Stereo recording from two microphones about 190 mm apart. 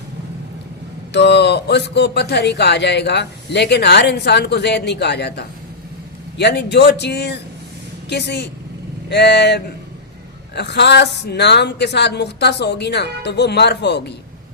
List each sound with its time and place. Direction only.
1.1 s speech: 60° left (ahead or behind)